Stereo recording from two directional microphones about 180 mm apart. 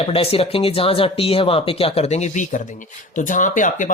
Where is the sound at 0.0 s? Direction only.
30° left (ahead or behind).